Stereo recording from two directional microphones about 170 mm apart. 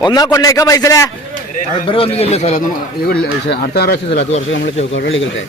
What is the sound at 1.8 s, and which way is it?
Speech, 35° left (ahead or behind).